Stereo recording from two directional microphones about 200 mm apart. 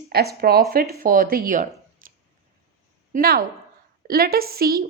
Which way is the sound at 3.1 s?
50° right (ahead or behind).